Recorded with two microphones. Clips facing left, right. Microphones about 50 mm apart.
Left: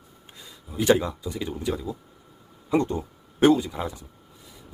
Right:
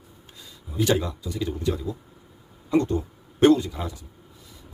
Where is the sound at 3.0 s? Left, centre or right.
Centre.